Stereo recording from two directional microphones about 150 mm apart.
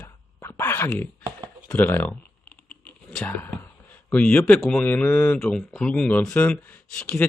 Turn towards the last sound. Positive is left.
turn(degrees=5)  # may be behind; listen again after turning